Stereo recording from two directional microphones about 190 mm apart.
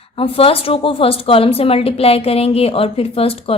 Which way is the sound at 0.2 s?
30° left (ahead or behind).